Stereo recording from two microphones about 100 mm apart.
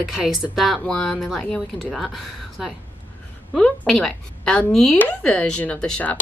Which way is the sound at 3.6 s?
5° left (ahead or behind).